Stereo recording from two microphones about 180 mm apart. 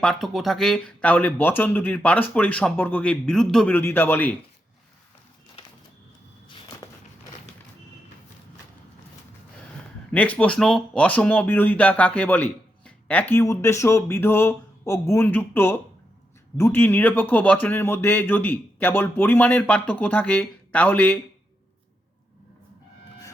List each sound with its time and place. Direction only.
0.0 s speech: 5° left (ahead or behind)
6.5 s walk: 20° left (ahead or behind)
10.1 s speech: 5° left (ahead or behind)